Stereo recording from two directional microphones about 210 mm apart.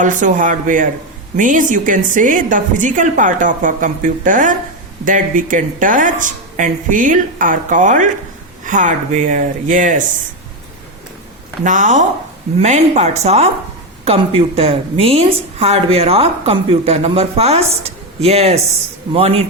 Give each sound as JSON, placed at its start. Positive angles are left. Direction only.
{"t": 0.0, "sound": "a woman's voice", "side_deg": -40}
{"t": 11.6, "sound": "a woman's voice", "side_deg": -35}